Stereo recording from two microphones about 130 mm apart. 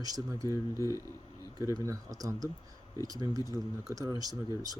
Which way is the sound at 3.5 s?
25° right (ahead or behind).